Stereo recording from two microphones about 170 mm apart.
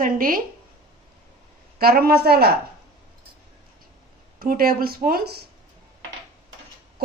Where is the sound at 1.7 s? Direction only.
65° right (ahead or behind).